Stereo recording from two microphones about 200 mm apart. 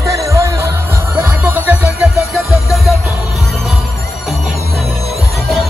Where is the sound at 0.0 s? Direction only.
15° right (ahead or behind).